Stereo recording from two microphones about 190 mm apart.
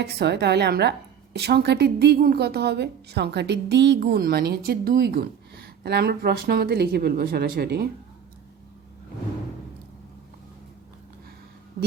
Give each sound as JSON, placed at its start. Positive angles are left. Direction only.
{"t": 0.0, "sound": "a woman's voice", "side_deg": -60}